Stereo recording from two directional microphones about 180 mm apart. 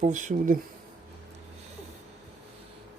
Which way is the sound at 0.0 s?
45° right (ahead or behind).